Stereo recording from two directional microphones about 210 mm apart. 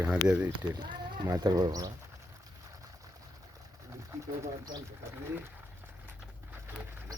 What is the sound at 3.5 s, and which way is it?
Bird, 15° right (ahead or behind).